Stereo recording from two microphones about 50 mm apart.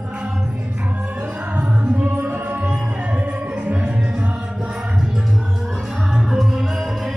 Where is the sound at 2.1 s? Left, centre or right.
Right.